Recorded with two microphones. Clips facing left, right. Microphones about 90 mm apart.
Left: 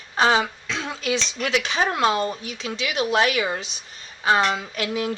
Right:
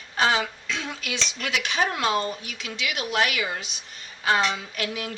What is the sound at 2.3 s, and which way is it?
Speech, 30° left (ahead or behind).